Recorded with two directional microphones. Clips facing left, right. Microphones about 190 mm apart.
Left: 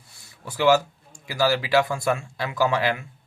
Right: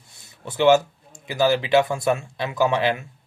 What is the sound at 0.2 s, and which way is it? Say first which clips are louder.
Speech: right 3 dB; 20° right (ahead or behind).